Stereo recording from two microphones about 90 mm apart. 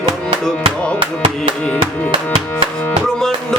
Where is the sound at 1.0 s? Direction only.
75° right (ahead or behind).